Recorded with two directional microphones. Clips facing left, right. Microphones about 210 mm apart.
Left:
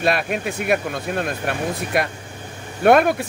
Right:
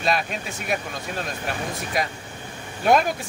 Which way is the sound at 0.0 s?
60° left (ahead or behind).